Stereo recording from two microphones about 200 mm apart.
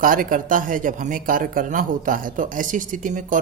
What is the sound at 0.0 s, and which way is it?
Speech, 45° right (ahead or behind).